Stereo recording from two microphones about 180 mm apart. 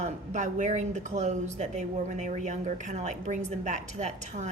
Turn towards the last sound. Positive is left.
turn(degrees=-40)  # may be behind; listen again after turning